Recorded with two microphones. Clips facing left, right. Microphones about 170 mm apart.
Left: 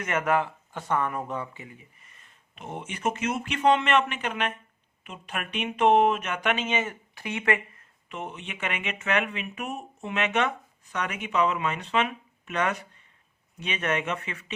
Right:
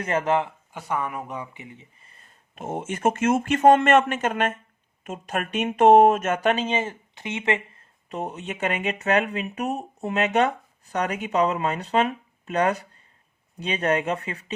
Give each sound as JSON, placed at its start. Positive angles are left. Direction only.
{"t": 0.0, "sound": "speech", "side_deg": -30}
{"t": 0.7, "sound": "speech", "side_deg": -10}
{"t": 2.6, "sound": "speech", "side_deg": -45}
{"t": 8.1, "sound": "speech", "side_deg": -40}